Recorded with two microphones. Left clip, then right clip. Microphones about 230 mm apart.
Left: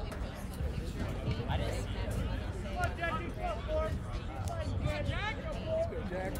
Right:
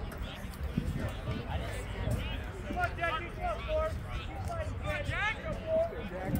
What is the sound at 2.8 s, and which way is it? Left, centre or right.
Vehicle, left.